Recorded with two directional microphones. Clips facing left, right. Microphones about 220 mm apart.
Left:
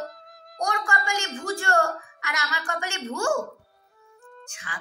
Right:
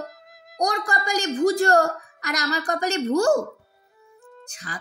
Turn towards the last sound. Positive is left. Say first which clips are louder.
# right 3 dB
turn(degrees=-40)  # may be behind; listen again after turning